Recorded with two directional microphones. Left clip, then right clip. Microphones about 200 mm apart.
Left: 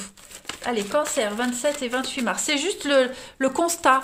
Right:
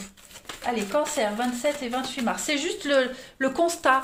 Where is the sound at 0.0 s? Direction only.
40° left (ahead or behind).